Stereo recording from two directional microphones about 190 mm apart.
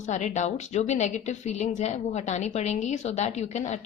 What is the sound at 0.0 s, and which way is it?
A woman's voice, 40° left (ahead or behind).